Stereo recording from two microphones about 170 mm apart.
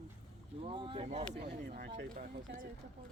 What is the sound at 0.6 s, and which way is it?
Speech, 30° right (ahead or behind).